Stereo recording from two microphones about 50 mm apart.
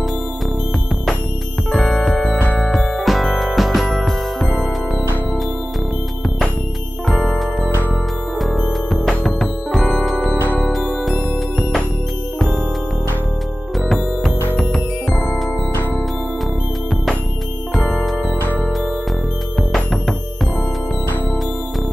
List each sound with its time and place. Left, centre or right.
1.7 s music: centre
7.1 s music: centre
10.3 s music: right
10.7 s music: centre
15.0 s music: centre
17.7 s music: centre
19.7 s music: centre